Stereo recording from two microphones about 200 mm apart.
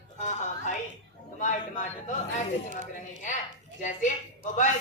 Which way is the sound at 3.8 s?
40° left (ahead or behind).